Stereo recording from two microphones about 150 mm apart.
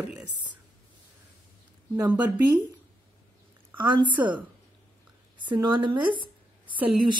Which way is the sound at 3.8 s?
30° right (ahead or behind).